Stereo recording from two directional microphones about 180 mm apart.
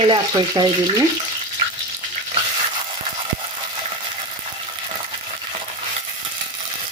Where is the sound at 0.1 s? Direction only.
25° right (ahead or behind).